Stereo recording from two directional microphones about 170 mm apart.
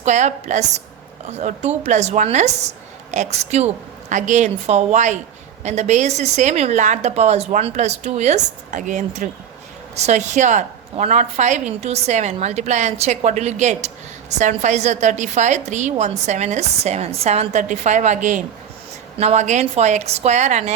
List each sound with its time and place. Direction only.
0.0 s a woman's voice: 45° right (ahead or behind)